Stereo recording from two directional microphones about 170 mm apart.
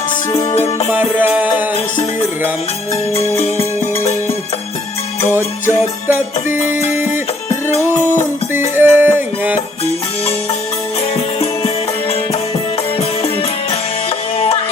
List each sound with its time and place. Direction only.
0.9 s music: 10° right (ahead or behind)
2.9 s music: 35° left (ahead or behind)
6.1 s music: 10° right (ahead or behind)
7.7 s music: 45° left (ahead or behind)
8.7 s music: 10° right (ahead or behind)
13.0 s music: 35° left (ahead or behind)